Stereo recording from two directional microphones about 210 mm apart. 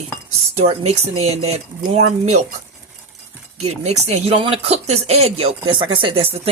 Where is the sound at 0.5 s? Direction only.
30° right (ahead or behind).